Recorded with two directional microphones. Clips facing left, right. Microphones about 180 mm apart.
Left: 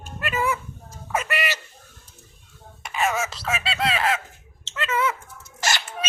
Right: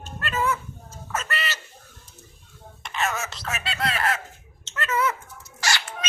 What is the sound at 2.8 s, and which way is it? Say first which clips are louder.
Whispering: left 4 dB; 10° left (ahead or behind).